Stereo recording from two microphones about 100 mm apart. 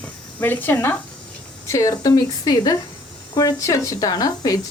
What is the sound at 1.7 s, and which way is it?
Speech, 35° left (ahead or behind).